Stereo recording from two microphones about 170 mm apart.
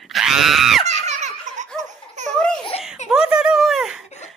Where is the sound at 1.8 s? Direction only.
45° right (ahead or behind).